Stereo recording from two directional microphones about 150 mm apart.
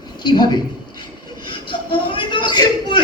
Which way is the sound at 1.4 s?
35° left (ahead or behind).